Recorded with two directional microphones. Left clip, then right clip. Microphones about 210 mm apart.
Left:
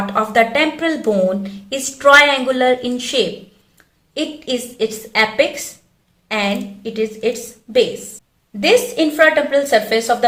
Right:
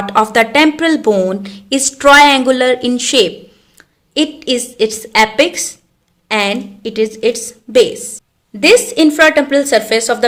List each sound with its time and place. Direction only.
0.0 s a woman's voice: 55° right (ahead or behind)